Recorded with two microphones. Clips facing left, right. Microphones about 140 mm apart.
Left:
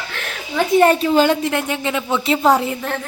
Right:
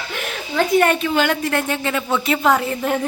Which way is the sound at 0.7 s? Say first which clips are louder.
Left 5 dB; 30° left (ahead or behind).